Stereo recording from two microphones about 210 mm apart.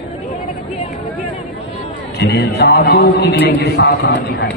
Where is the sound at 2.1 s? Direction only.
50° left (ahead or behind).